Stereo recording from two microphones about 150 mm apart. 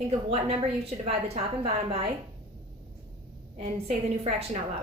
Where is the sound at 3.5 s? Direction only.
50° right (ahead or behind).